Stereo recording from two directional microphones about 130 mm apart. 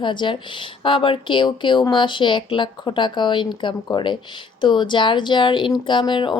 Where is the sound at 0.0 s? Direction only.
40° left (ahead or behind).